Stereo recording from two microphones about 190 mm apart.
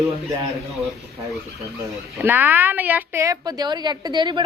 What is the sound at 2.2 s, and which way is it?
A woman's voice, 10° right (ahead or behind).